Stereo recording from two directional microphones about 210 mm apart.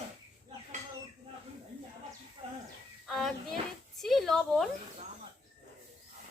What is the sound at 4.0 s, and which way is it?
Speech, centre (ahead or behind).